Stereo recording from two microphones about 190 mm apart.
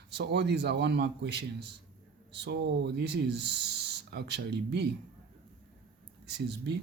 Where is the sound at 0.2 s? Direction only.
60° right (ahead or behind).